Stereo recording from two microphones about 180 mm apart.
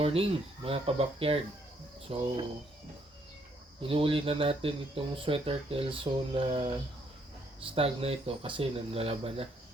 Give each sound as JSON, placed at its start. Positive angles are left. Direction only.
{"t": 0.0, "sound": "speech", "side_deg": -30}
{"t": 3.8, "sound": "speech", "side_deg": -30}